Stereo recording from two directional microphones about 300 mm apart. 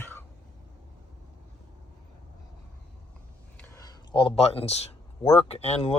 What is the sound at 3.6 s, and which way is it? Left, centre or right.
Speech, centre.